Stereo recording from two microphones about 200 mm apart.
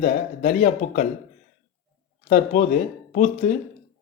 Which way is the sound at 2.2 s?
40° left (ahead or behind).